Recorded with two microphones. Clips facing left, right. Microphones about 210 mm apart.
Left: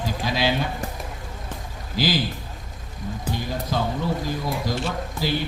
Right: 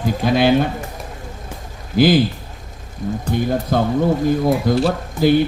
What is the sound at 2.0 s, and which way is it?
Speech, 55° right (ahead or behind).